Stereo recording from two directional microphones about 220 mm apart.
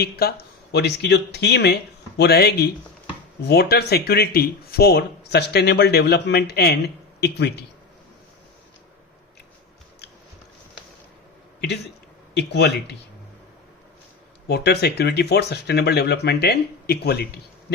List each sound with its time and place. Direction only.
0.0 s speech: 45° left (ahead or behind)
12.3 s speech: 50° left (ahead or behind)
14.4 s speech: 50° left (ahead or behind)